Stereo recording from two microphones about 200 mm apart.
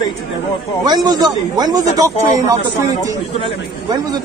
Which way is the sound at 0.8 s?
20° right (ahead or behind).